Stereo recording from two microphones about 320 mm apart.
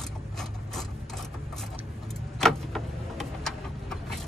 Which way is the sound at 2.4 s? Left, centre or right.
Centre.